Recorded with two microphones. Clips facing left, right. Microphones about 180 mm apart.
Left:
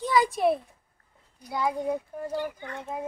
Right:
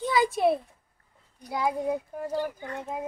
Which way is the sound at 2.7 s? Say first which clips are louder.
Right 1 dB; centre (ahead or behind).